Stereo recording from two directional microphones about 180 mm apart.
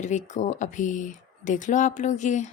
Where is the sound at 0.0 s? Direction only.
40° left (ahead or behind).